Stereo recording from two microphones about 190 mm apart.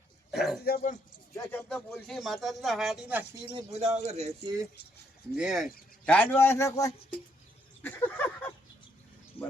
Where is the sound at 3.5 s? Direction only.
35° right (ahead or behind).